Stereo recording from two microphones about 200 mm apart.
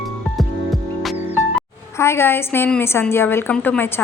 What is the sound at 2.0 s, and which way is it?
Speech, 10° left (ahead or behind).